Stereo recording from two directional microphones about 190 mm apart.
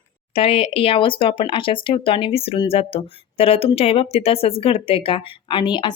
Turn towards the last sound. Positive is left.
turn(degrees=25)  # may be behind; listen again after turning